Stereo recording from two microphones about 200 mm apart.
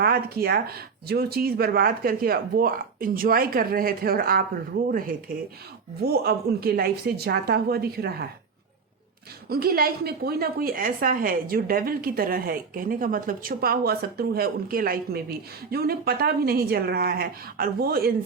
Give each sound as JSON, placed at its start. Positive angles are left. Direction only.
{"t": 0.0, "sound": "a woman's voice", "side_deg": -50}
{"t": 9.5, "sound": "a woman's voice", "side_deg": -50}